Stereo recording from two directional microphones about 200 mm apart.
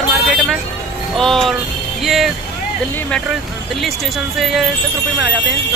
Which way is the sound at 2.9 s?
10° left (ahead or behind).